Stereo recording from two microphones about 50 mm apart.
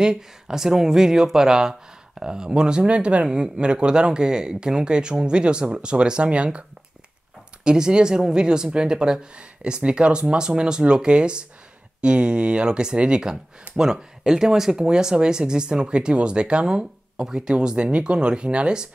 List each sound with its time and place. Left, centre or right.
0.0 s speech: centre
7.6 s speech: centre